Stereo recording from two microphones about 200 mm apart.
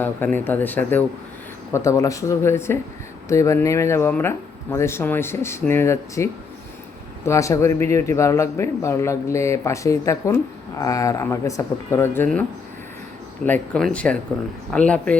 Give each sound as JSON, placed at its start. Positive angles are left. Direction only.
{"t": 0.0, "sound": "speech", "side_deg": 10}